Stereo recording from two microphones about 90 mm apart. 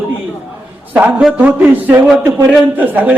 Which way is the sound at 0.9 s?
15° right (ahead or behind).